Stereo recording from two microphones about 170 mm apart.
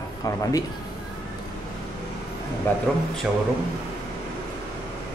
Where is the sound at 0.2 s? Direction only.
20° left (ahead or behind).